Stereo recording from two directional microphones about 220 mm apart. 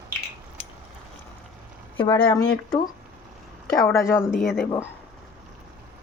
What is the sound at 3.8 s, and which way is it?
Speech, 10° left (ahead or behind).